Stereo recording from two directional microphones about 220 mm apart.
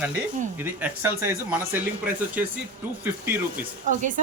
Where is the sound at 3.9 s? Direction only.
35° right (ahead or behind).